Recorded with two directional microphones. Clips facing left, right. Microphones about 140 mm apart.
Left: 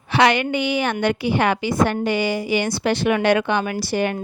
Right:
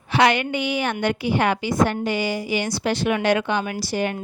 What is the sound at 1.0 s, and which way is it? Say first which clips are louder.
A woman's voice: left 1 dB; 80° left.